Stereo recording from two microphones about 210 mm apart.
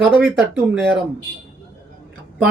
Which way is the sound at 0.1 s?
5° right (ahead or behind).